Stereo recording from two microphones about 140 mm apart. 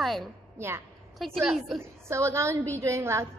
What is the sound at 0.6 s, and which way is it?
Speech, 20° right (ahead or behind).